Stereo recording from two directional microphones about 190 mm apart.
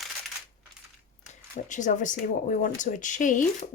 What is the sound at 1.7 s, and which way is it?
Speech, 40° left (ahead or behind).